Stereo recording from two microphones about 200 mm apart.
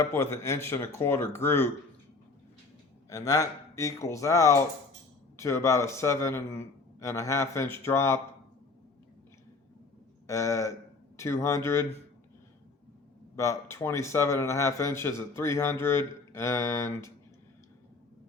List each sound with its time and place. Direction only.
0.0 s a man's voice: 15° left (ahead or behind)
3.1 s a man's voice: 15° left (ahead or behind)
10.2 s a man's voice: 15° left (ahead or behind)
13.3 s a man's voice: 15° left (ahead or behind)